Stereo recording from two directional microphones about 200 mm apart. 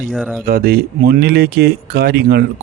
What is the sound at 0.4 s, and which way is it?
Speech, 50° right (ahead or behind).